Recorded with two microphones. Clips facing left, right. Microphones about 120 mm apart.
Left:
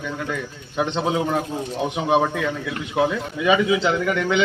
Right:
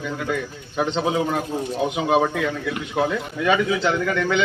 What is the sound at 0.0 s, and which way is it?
A man's voice, 5° right (ahead or behind).